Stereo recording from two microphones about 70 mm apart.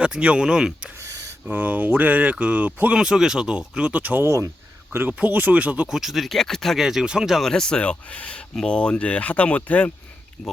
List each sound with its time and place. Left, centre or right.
0.0 s speech: centre
0.9 s a sound: right
1.5 s speech: right
3.0 s speech: centre
4.2 s speech: right
4.9 s speech: right
5.9 s speech: centre
6.8 s speech: centre
7.4 s speech: centre
10.4 s speech: centre